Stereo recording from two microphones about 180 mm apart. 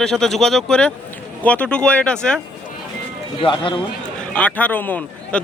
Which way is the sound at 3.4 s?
25° left (ahead or behind).